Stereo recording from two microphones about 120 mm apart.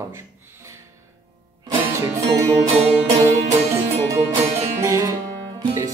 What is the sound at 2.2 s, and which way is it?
Music, 65° right (ahead or behind).